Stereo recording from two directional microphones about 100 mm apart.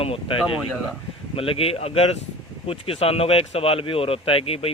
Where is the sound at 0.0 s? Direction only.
70° left (ahead or behind).